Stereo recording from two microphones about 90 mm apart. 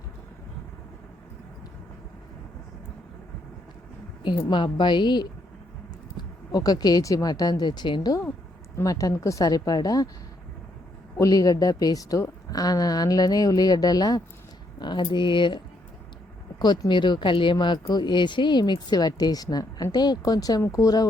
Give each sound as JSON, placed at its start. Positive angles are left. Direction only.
{"t": 4.5, "sound": "speech", "side_deg": 60}
{"t": 8.7, "sound": "a woman's voice", "side_deg": 40}
{"t": 11.2, "sound": "speech", "side_deg": 45}
{"t": 14.8, "sound": "speech", "side_deg": 60}
{"t": 16.9, "sound": "a woman's voice", "side_deg": 60}